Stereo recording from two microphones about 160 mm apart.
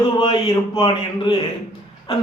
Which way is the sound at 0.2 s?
35° left (ahead or behind).